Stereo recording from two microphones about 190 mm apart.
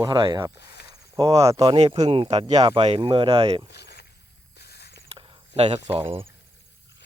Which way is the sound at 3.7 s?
60° left (ahead or behind).